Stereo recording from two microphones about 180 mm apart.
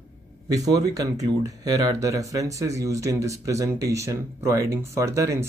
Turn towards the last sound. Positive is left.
turn(degrees=-15)  # may be behind; listen again after turning